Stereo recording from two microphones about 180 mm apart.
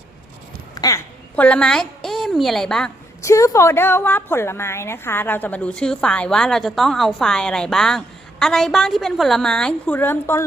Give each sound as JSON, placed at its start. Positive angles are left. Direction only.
{"t": 0.8, "sound": "a woman's voice", "side_deg": 20}
{"t": 1.4, "sound": "a woman's voice", "side_deg": 5}
{"t": 3.2, "sound": "a woman's voice", "side_deg": 15}